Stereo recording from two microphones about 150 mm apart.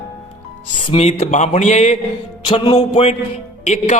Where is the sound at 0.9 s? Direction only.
45° left (ahead or behind).